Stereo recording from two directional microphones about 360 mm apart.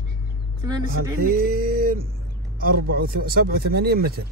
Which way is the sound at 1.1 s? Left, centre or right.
Right.